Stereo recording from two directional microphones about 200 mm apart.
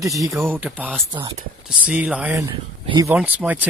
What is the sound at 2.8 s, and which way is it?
Speech, 25° right (ahead or behind).